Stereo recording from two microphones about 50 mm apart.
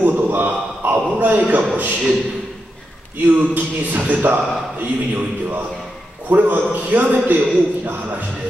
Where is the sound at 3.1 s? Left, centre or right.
Right.